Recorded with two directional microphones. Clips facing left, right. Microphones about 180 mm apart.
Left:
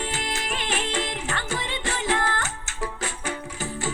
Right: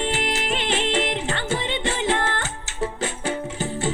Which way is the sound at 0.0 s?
25° right (ahead or behind).